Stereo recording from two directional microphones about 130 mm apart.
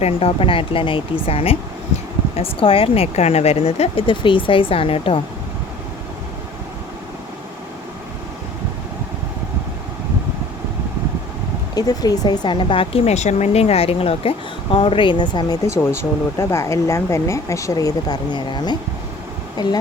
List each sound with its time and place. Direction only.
0.0 s speech: 45° left (ahead or behind)
11.7 s a woman's voice: 30° left (ahead or behind)
15.6 s speech: 20° left (ahead or behind)